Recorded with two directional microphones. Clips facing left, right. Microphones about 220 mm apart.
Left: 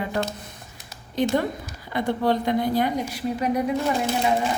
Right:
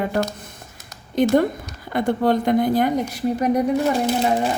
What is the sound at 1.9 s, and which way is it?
A woman's voice, 50° right (ahead or behind).